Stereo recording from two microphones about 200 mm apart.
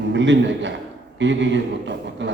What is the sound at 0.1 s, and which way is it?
A man's voice, 65° right (ahead or behind).